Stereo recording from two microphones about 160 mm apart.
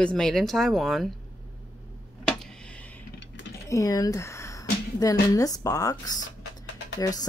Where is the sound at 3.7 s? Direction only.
20° left (ahead or behind).